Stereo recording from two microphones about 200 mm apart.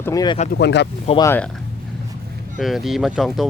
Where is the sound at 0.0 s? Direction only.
20° left (ahead or behind).